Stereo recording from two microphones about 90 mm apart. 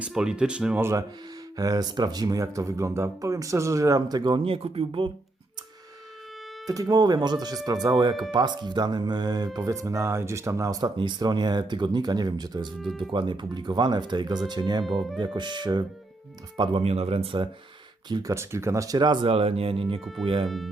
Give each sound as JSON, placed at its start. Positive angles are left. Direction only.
{"t": 0.0, "sound": "speech", "side_deg": -10}
{"t": 0.8, "sound": "speech", "side_deg": -30}
{"t": 1.5, "sound": "speech", "side_deg": -45}
{"t": 4.4, "sound": "speech", "side_deg": -90}
{"t": 6.7, "sound": "speech", "side_deg": -45}
{"t": 10.9, "sound": "speech", "side_deg": -60}
{"t": 12.8, "sound": "speech", "side_deg": 0}
{"t": 13.1, "sound": "speech", "side_deg": -60}
{"t": 17.2, "sound": "speech", "side_deg": -65}
{"t": 18.2, "sound": "speech", "side_deg": -35}
{"t": 18.9, "sound": "speech", "side_deg": -55}
{"t": 20.2, "sound": "speech", "side_deg": -75}